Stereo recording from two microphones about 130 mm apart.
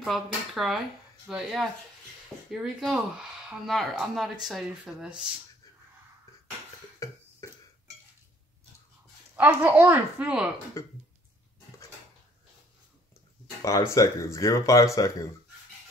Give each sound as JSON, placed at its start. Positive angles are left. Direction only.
{"t": 0.0, "sound": "speech", "side_deg": 0}
{"t": 7.0, "sound": "cough", "side_deg": 25}
{"t": 9.4, "sound": "speech", "side_deg": -10}
{"t": 10.8, "sound": "speech", "side_deg": 20}
{"t": 13.6, "sound": "speech", "side_deg": 25}